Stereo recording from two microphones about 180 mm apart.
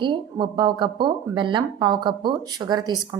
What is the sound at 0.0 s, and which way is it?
A woman's voice, 25° right (ahead or behind).